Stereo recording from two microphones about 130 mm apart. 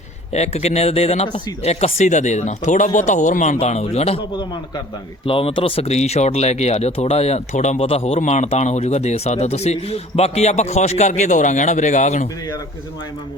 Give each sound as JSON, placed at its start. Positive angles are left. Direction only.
{"t": 0.3, "sound": "speech", "side_deg": 55}
{"t": 3.6, "sound": "speech", "side_deg": 55}
{"t": 5.2, "sound": "speech", "side_deg": 45}